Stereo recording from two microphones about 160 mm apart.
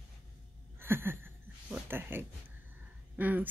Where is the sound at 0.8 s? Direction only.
15° right (ahead or behind).